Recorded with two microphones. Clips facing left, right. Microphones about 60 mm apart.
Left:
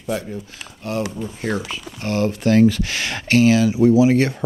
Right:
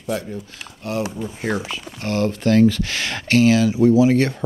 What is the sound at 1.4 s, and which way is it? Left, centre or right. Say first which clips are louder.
Speech: even; right.